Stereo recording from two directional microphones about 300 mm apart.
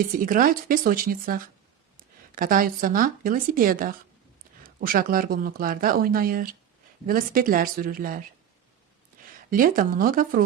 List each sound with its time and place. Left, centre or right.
0.0 s speech: right
9.5 s speech: right